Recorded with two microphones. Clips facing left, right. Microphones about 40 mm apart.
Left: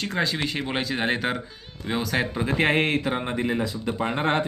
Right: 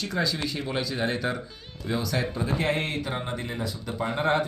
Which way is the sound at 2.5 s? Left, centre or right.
Left.